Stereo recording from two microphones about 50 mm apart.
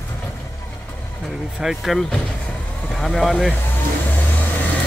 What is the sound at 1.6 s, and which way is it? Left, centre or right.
Speech, centre.